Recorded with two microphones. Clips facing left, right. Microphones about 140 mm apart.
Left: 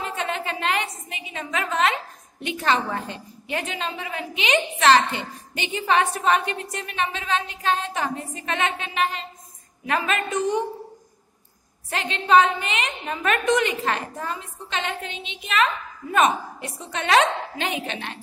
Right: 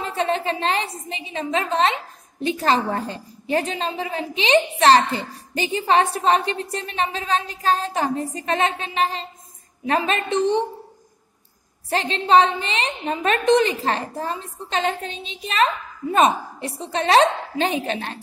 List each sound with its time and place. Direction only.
0.0 s a sound: 35° right (ahead or behind)
1.0 s a woman's voice: 30° right (ahead or behind)
11.9 s a woman's voice: 35° right (ahead or behind)